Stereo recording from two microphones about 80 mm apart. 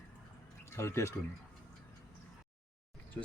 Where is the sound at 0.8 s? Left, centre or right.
Left.